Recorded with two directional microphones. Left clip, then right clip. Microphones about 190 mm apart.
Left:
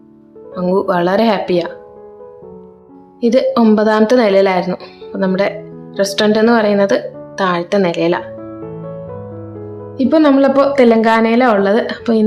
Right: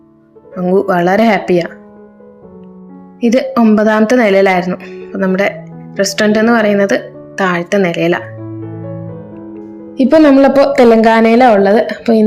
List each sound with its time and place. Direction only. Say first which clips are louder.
0.6 s speech: right 3 dB; 5° right (ahead or behind)
3.2 s speech: even; 10° right (ahead or behind)
10.0 s a woman's voice: right 4 dB; 20° right (ahead or behind)